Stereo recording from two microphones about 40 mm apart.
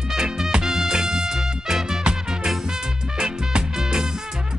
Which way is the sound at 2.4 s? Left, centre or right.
Centre.